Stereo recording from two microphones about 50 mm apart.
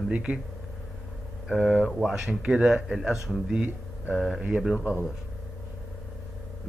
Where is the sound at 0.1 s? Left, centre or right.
Right.